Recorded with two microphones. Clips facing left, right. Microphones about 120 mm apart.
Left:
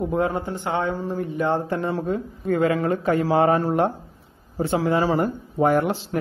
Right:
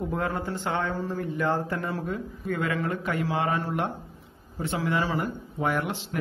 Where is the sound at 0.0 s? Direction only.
20° left (ahead or behind).